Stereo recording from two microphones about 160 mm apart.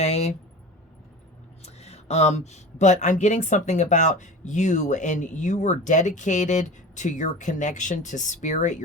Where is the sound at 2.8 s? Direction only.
50° left (ahead or behind).